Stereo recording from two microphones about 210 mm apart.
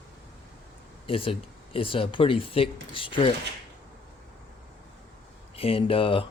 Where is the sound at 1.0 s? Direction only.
25° left (ahead or behind).